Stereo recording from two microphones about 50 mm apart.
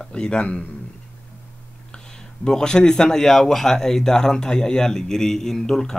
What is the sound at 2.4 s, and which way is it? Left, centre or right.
Speech, centre.